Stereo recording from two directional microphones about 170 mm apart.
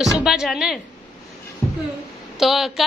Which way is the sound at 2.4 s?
Centre (ahead or behind).